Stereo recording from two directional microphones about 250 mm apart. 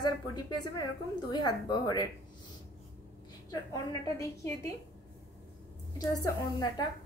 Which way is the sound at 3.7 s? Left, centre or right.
Centre.